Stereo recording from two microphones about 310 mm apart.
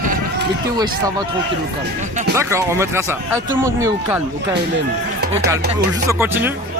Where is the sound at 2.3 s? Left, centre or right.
Centre.